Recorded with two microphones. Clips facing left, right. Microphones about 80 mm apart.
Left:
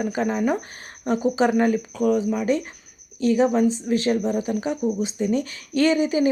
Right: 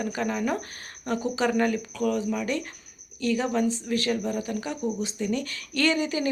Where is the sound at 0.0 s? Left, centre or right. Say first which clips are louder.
Left 5 dB; left.